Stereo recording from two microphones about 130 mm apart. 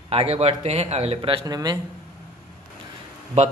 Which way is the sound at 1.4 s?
30° right (ahead or behind).